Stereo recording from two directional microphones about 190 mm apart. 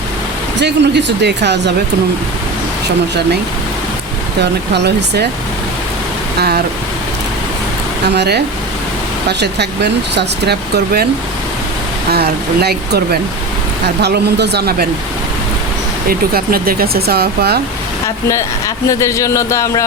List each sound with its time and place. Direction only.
0.6 s speech: 65° right (ahead or behind)
4.7 s speech: 60° right (ahead or behind)
8.0 s speech: 60° right (ahead or behind)
9.4 s speech: 60° right (ahead or behind)
12.1 s speech: 55° right (ahead or behind)
16.0 s speech: 50° right (ahead or behind)
18.9 s speech: 15° left (ahead or behind)